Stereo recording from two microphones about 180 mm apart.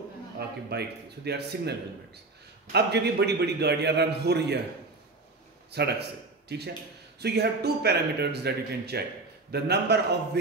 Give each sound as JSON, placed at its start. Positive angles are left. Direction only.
{"t": 0.7, "sound": "a man's voice", "side_deg": -65}
{"t": 5.7, "sound": "a man's voice", "side_deg": -65}
{"t": 7.2, "sound": "a man's voice", "side_deg": -65}